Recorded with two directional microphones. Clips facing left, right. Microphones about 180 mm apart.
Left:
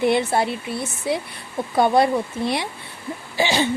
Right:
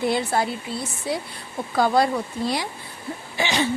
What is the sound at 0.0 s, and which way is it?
A woman's voice, 20° left (ahead or behind).